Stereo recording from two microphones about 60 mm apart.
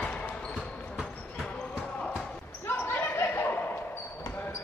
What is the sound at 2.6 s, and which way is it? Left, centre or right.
Basketball bounce, left.